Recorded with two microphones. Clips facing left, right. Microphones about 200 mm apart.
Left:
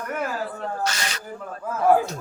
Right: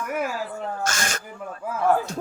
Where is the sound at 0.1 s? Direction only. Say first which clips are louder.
Right 1 dB; 10° right (ahead or behind).